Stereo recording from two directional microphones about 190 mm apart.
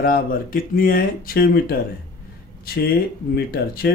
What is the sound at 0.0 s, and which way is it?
A man's voice, 50° left (ahead or behind).